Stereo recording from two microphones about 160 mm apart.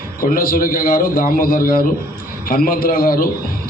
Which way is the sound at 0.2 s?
60° left (ahead or behind).